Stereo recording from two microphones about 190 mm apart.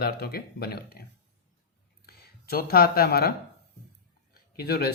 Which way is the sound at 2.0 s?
55° left (ahead or behind).